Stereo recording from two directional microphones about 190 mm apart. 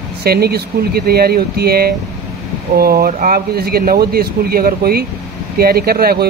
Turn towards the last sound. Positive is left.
turn(degrees=-55)  # may be behind; listen again after turning